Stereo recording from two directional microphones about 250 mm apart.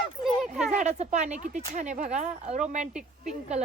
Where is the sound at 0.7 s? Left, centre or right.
Right.